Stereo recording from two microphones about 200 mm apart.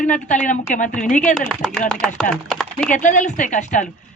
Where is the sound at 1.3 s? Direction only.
Centre (ahead or behind).